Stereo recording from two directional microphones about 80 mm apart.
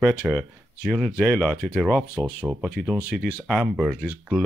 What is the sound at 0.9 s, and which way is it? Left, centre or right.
Speech, centre.